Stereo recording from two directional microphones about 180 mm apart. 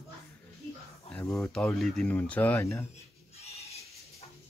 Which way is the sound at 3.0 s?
35° left (ahead or behind).